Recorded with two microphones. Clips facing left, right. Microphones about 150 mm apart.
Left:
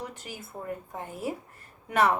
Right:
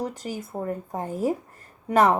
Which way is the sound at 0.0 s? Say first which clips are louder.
Right 9 dB; 40° right (ahead or behind).